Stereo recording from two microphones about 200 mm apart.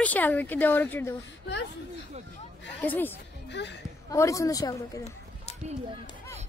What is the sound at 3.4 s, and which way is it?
Speech, 60° left (ahead or behind).